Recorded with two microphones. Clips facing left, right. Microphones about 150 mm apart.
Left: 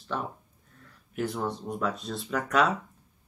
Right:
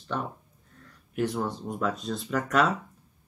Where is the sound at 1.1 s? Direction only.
Centre (ahead or behind).